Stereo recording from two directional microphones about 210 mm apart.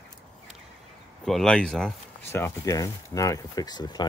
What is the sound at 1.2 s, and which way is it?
Speech, centre (ahead or behind).